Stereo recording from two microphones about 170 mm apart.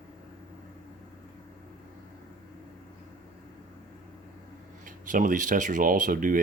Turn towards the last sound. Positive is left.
turn(degrees=-55)  # may be behind; listen again after turning